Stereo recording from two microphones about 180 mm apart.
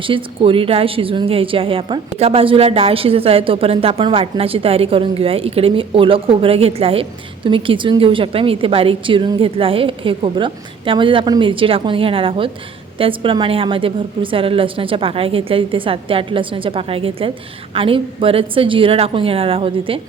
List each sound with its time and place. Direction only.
0.0 s a woman's voice: 30° right (ahead or behind)